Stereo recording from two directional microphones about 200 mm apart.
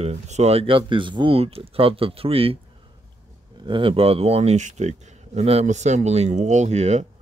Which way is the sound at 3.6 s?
25° right (ahead or behind).